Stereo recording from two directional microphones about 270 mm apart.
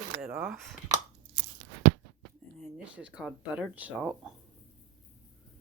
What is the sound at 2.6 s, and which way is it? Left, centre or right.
Speech, centre.